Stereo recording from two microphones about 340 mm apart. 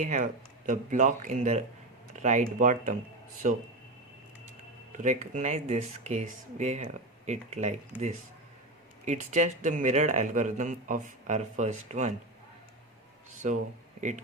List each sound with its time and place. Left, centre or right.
0.0 s speech: right
4.9 s speech: right
13.4 s speech: centre